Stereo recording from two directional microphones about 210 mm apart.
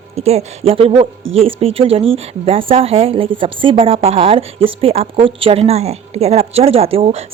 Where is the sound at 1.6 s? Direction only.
25° right (ahead or behind).